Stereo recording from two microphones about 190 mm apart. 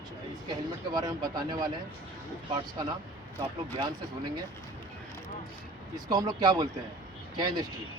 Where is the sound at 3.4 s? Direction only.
25° right (ahead or behind).